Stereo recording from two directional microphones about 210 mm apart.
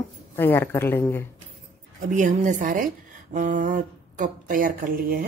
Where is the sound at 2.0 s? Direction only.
40° right (ahead or behind).